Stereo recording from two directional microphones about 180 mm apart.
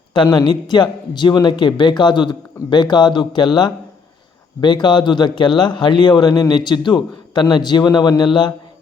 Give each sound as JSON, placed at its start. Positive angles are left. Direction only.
{"t": 0.1, "sound": "a man's voice", "side_deg": 25}